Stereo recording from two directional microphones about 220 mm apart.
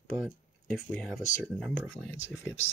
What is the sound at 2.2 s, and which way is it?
Speech, 60° left (ahead or behind).